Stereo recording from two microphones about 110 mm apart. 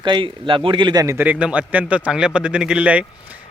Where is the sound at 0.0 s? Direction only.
45° right (ahead or behind).